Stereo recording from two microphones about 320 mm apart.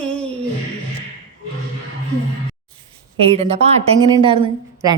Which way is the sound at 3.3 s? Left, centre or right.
Centre.